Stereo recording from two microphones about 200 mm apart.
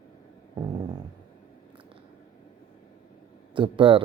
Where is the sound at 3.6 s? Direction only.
25° right (ahead or behind).